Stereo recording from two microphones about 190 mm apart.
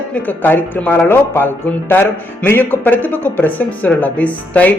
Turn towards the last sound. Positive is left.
turn(degrees=5)  # may be behind; listen again after turning